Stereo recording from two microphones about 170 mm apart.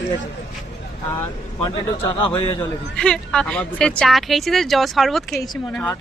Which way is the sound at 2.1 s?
25° left (ahead or behind).